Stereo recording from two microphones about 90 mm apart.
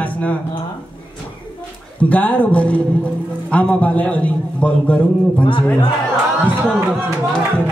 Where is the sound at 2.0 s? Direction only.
15° left (ahead or behind).